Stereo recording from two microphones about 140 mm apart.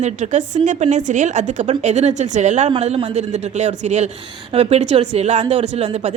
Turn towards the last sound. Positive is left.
turn(degrees=-50)  # may be behind; listen again after turning